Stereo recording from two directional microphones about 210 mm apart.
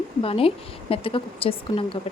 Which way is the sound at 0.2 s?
25° left (ahead or behind).